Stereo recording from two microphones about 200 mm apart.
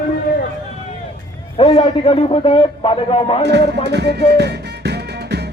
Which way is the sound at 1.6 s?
30° left (ahead or behind).